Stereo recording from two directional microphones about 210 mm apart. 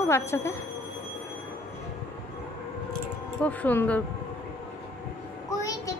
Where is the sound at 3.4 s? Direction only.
5° left (ahead or behind).